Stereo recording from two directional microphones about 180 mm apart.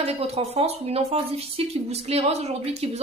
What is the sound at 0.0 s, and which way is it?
A woman's voice, 35° right (ahead or behind).